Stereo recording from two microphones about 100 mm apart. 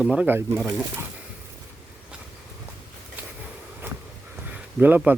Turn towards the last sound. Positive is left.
turn(degrees=-20)  # may be behind; listen again after turning